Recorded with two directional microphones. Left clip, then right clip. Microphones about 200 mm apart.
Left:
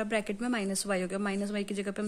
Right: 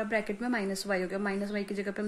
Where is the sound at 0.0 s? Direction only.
30° left (ahead or behind).